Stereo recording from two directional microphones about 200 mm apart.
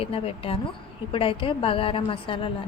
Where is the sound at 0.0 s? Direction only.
30° left (ahead or behind).